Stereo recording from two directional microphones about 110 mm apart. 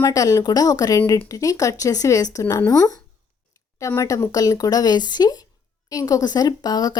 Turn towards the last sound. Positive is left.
turn(degrees=40)  # may be behind; listen again after turning